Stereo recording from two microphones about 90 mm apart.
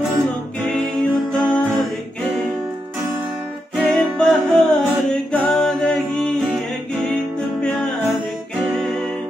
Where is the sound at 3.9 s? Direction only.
5° left (ahead or behind).